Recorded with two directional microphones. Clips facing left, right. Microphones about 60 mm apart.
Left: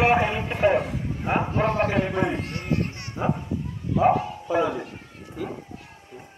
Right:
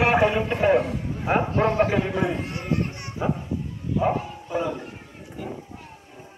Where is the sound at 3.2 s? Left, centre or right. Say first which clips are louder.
Even; left.